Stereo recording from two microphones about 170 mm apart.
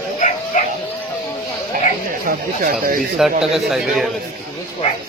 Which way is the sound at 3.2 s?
Centre (ahead or behind).